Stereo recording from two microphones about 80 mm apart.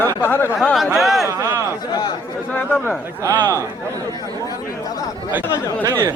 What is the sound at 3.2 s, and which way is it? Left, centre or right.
Speech, right.